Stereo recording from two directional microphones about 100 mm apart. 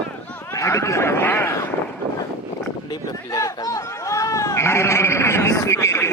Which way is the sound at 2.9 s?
40° left (ahead or behind).